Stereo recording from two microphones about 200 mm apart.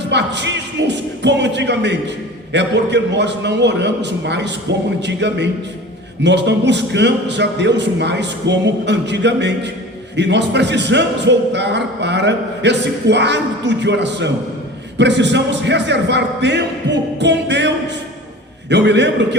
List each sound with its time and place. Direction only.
0.1 s speech: 60° right (ahead or behind)